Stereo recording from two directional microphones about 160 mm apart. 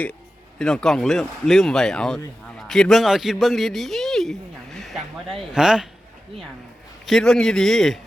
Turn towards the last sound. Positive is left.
turn(degrees=0)  # may be behind; listen again after turning